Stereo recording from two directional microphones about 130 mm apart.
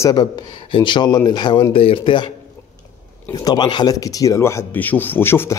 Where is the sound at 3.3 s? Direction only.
30° left (ahead or behind).